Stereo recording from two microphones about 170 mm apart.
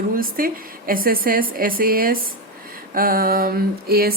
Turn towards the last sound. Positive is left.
turn(degrees=-65)  # may be behind; listen again after turning